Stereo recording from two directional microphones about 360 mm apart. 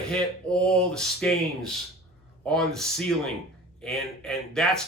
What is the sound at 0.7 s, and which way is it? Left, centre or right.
Speech, centre.